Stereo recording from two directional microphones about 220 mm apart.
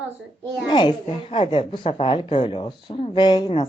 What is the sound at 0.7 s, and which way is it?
A woman's voice, 20° left (ahead or behind).